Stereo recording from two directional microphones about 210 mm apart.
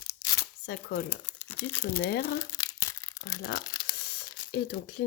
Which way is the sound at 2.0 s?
50° left (ahead or behind).